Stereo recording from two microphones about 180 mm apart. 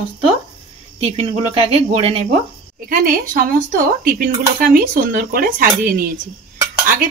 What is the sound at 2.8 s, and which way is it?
Speech, 50° right (ahead or behind).